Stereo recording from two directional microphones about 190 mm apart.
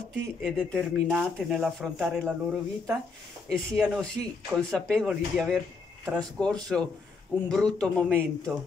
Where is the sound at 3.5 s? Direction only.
5° left (ahead or behind).